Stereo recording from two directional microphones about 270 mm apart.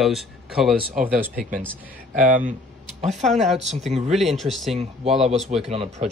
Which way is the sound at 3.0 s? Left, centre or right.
Right.